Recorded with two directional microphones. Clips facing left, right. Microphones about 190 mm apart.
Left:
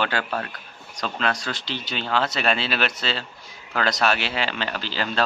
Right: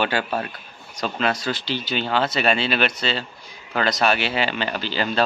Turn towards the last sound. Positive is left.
turn(degrees=-5)  # may be behind; listen again after turning